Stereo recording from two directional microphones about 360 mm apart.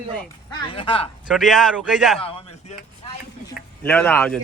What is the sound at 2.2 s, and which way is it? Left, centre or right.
Speech, centre.